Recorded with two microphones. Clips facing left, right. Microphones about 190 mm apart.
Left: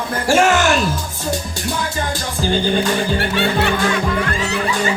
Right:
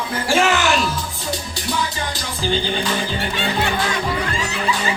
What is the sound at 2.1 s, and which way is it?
Music, 45° left (ahead or behind).